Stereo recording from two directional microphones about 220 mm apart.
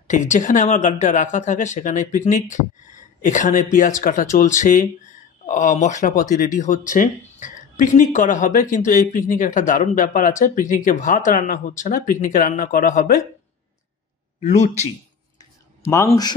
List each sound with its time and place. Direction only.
0.1 s speech: 35° left (ahead or behind)
14.4 s speech: 30° left (ahead or behind)
15.9 s speech: 15° left (ahead or behind)